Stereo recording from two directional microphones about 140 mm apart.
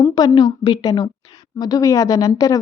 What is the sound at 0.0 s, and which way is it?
A woman's voice, 35° left (ahead or behind).